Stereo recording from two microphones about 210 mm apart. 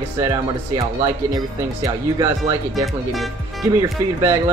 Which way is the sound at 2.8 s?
Centre (ahead or behind).